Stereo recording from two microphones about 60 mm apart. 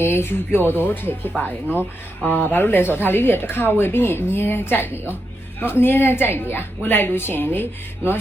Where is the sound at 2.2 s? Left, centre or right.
Left.